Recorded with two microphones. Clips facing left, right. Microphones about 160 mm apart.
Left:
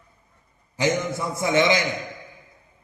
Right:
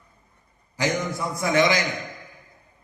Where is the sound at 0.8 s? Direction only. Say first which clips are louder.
Left 2 dB; 25° left (ahead or behind).